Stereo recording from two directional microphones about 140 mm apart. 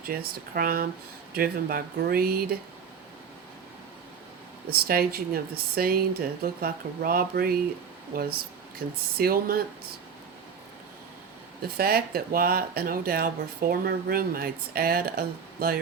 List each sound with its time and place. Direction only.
0.0 s speech: 90° right
4.7 s speech: 90° right
11.6 s speech: 90° right